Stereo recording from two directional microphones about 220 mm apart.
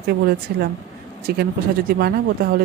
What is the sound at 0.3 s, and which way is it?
A woman's voice, 45° right (ahead or behind).